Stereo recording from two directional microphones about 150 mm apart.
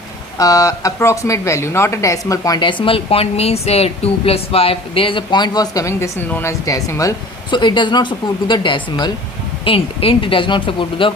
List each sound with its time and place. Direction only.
0.3 s speech: 25° left (ahead or behind)